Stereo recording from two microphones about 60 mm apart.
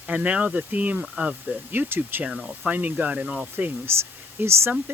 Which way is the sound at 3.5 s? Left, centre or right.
Right.